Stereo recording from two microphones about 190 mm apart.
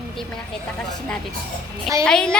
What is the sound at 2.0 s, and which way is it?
Speech, 5° left (ahead or behind).